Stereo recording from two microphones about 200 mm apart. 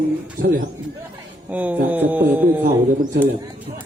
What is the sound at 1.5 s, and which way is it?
Speech, 10° right (ahead or behind).